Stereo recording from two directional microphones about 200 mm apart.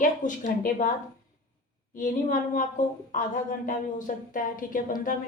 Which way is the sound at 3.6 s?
40° left (ahead or behind).